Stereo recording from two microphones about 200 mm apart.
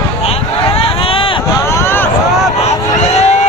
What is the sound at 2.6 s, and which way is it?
Vehicle, 35° left (ahead or behind).